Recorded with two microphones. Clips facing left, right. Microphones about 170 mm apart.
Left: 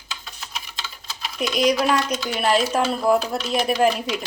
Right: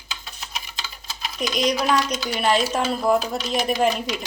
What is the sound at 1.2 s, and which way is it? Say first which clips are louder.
Speech: left 2 dB; 5° left (ahead or behind).